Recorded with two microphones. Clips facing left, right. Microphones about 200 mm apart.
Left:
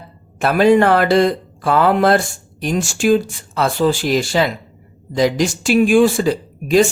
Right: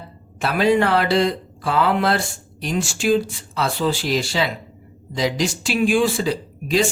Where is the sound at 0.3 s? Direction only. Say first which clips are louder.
Left 5 dB; 50° left (ahead or behind).